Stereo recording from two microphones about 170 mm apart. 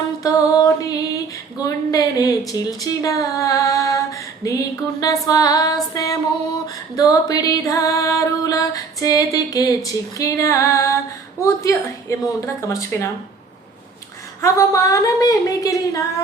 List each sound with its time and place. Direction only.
0.2 s music: 20° left (ahead or behind)
1.6 s a sound: 20° left (ahead or behind)
2.5 s speech: 20° left (ahead or behind)
5.2 s music: 20° left (ahead or behind)
11.3 s a woman's voice: 15° left (ahead or behind)
14.4 s music: 20° left (ahead or behind)